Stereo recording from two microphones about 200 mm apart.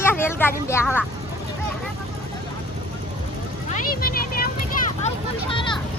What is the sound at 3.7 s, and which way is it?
Vehicle, 45° left (ahead or behind).